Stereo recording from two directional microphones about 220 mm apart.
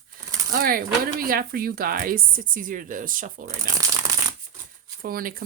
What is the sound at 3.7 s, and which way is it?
Shuffling cards, 15° right (ahead or behind).